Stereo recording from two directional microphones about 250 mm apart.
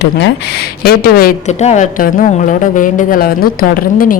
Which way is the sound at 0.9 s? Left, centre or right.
Left.